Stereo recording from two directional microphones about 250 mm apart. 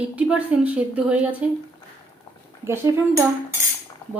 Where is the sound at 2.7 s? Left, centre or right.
Centre.